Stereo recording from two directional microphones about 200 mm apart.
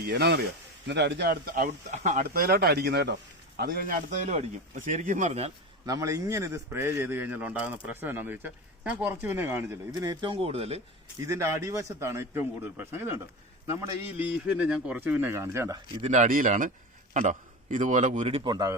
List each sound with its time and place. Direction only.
0.1 s speech: 55° right (ahead or behind)
3.6 s speech: 45° right (ahead or behind)
5.8 s a man's voice: 15° right (ahead or behind)
11.2 s a man's voice: 15° right (ahead or behind)
16.0 s speech: 35° right (ahead or behind); by 18.8 s 20° right (ahead or behind)